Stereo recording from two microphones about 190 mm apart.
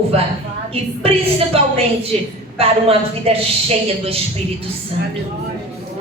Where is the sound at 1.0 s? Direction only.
30° right (ahead or behind).